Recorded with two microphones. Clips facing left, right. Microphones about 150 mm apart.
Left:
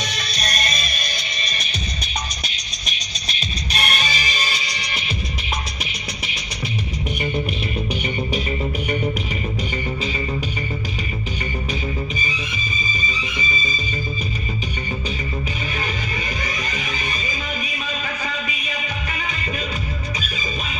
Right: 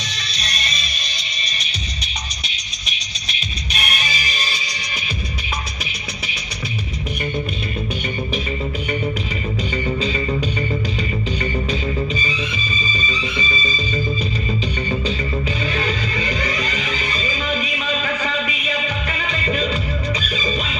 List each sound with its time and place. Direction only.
0.1 s music: 50° left (ahead or behind)
11.7 s music: 10° left (ahead or behind)
15.6 s music: 15° left (ahead or behind)
17.5 s music: 90° right